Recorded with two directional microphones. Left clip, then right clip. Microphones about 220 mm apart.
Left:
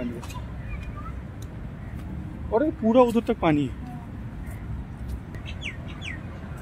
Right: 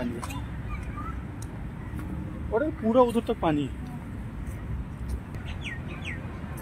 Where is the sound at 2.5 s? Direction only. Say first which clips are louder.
Left 3 dB; 30° left (ahead or behind).